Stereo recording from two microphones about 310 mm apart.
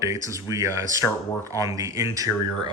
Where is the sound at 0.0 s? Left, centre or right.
Centre.